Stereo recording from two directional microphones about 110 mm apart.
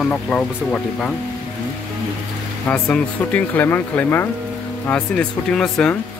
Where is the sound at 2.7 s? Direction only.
10° left (ahead or behind).